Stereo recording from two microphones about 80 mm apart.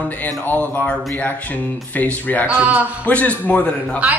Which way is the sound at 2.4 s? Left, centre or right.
Right.